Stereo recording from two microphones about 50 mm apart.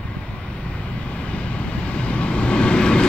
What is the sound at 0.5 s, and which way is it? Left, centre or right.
Vehicle, left.